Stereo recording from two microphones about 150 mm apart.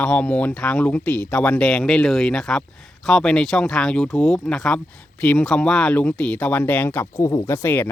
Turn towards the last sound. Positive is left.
turn(degrees=15)  # may be behind; listen again after turning